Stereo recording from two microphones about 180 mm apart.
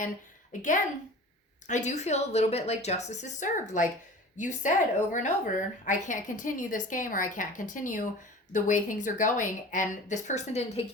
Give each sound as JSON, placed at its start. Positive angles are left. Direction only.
{"t": 1.6, "sound": "a woman's voice", "side_deg": 40}